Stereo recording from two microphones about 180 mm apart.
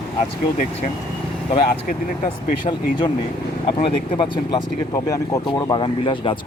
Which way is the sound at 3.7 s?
30° left (ahead or behind).